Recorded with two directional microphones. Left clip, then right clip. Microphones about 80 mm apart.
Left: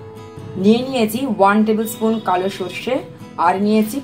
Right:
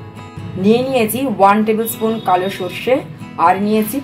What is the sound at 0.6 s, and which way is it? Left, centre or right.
A woman's voice, left.